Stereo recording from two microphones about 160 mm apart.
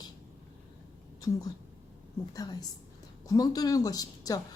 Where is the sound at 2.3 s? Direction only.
25° left (ahead or behind).